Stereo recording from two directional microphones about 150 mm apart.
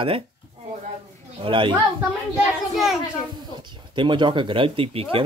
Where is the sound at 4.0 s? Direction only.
30° right (ahead or behind).